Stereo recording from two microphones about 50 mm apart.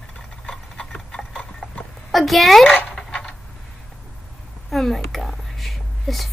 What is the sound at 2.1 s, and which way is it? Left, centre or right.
Speech, centre.